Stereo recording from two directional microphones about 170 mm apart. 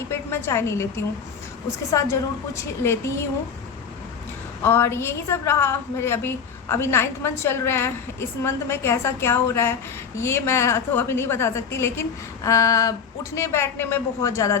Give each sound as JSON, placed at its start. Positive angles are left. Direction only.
{"t": 0.1, "sound": "a woman's voice", "side_deg": 15}
{"t": 4.6, "sound": "a woman's voice", "side_deg": 15}